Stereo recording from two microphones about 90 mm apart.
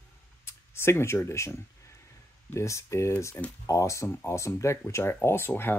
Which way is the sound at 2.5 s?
35° left (ahead or behind).